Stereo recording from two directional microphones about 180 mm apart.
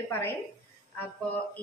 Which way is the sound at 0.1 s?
15° left (ahead or behind).